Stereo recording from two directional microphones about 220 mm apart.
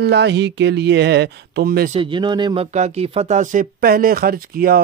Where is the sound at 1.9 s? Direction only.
20° right (ahead or behind).